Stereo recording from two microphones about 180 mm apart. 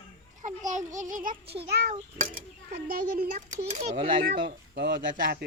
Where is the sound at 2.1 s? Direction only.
50° right (ahead or behind).